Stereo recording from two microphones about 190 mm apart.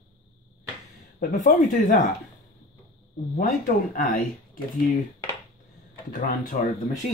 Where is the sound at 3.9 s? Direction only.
50° left (ahead or behind).